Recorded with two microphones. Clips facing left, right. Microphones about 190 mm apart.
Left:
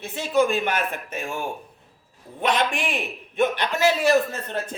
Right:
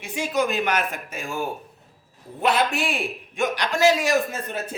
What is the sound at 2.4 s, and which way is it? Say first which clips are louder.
A man's voice: right 1 dB; 5° right (ahead or behind).